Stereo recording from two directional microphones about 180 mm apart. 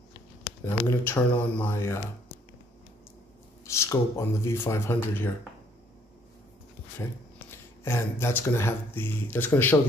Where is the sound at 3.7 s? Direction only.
15° left (ahead or behind).